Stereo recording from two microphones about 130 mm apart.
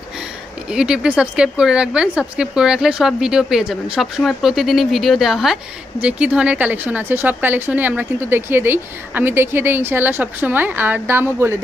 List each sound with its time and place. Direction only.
0.7 s a woman's voice: 5° right (ahead or behind)